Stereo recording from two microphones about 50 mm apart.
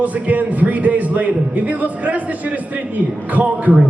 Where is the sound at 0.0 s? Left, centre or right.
Right.